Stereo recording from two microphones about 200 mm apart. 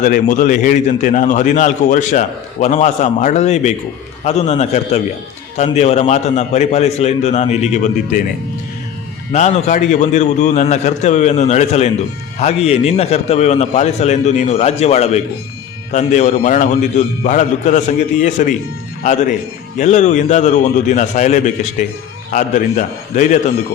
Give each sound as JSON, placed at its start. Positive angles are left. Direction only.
{"t": 0.0, "sound": "a man's voice", "side_deg": 40}
{"t": 9.3, "sound": "a man's voice", "side_deg": 35}